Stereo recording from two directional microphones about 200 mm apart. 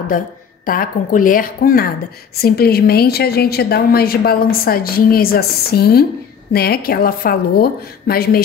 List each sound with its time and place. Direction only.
0.1 s a woman's voice: 45° left (ahead or behind)